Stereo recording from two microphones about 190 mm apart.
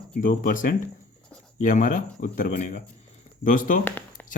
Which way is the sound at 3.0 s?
45° left (ahead or behind).